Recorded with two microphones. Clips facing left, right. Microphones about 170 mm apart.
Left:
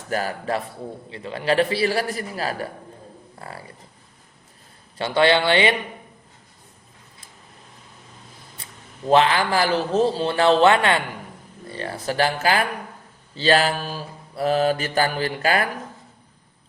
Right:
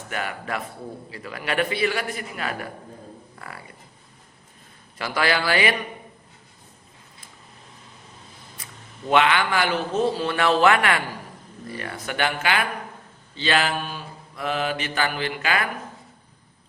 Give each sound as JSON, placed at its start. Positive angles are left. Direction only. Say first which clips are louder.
{"t": 0.1, "sound": "mantra", "louder": "left 5 dB", "side_deg": 35}
{"t": 3.3, "sound": "speech", "louder": "left 6 dB", "side_deg": 30}
{"t": 4.9, "sound": "speech", "louder": "left 6 dB", "side_deg": 30}
{"t": 8.6, "sound": "a sound", "louder": "even", "side_deg": 30}
{"t": 9.0, "sound": "mantra", "louder": "left 2 dB", "side_deg": 35}